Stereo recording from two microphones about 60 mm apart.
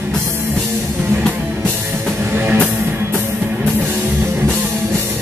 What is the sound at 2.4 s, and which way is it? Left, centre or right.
Music, right.